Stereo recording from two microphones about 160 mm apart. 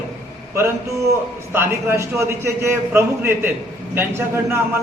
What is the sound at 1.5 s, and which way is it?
A man's voice, 15° right (ahead or behind).